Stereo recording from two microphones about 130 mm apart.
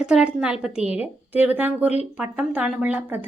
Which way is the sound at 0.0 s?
5° right (ahead or behind).